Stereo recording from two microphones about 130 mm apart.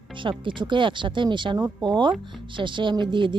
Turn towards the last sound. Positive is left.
turn(degrees=-40)  # may be behind; listen again after turning